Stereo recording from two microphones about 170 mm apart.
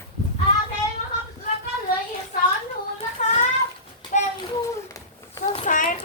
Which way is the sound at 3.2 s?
45° left (ahead or behind).